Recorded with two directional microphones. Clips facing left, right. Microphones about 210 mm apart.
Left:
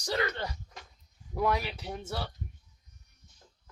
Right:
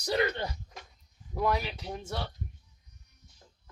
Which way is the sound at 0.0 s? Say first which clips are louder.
Right 3 dB; 20° right (ahead or behind).